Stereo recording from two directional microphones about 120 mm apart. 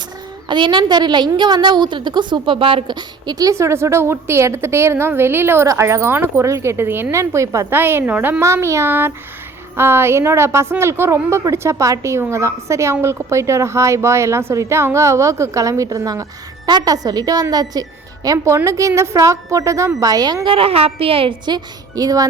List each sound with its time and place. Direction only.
0.4 s a woman's voice: 40° right (ahead or behind)
20.5 s a woman's voice: 50° right (ahead or behind); by 22.3 s 30° right (ahead or behind)